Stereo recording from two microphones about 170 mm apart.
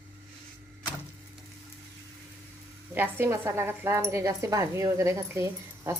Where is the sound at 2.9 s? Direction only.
10° right (ahead or behind).